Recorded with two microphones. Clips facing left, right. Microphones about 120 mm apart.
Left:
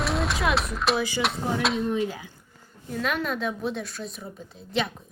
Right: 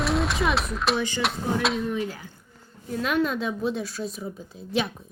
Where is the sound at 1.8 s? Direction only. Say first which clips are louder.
Left 2 dB; 20° left (ahead or behind).